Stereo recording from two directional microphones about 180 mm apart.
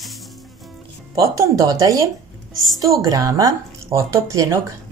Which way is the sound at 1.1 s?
20° right (ahead or behind).